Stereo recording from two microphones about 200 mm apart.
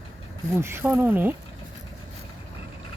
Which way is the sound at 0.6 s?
10° right (ahead or behind).